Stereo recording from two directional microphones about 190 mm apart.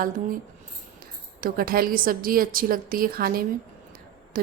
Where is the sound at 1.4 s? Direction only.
50° right (ahead or behind).